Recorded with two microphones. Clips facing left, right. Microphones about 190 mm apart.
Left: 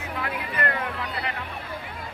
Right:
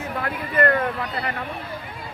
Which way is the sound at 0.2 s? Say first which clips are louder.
Right 7 dB; 50° right (ahead or behind).